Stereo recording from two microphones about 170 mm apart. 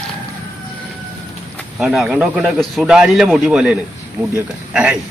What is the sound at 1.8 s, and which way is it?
Speech, 5° right (ahead or behind).